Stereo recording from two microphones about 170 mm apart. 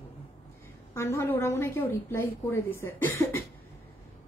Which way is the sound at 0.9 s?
15° left (ahead or behind).